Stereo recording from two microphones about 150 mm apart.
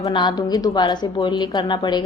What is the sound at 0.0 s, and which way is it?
A woman's voice, 30° left (ahead or behind).